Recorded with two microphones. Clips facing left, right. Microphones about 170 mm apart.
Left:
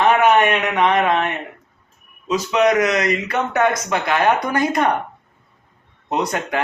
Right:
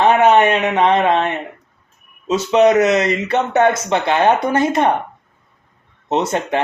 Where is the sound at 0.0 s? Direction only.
25° right (ahead or behind).